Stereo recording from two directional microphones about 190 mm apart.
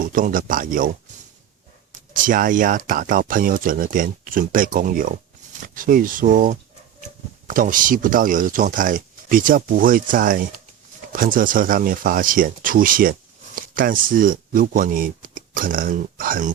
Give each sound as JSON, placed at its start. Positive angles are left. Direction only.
{"t": 0.0, "sound": "speech", "side_deg": -45}
{"t": 2.1, "sound": "speech", "side_deg": -45}